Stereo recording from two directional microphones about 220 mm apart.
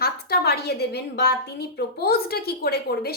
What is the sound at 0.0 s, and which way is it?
A woman's voice, 45° left (ahead or behind).